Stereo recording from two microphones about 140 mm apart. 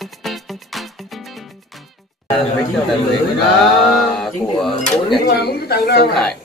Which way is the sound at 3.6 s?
Centre (ahead or behind).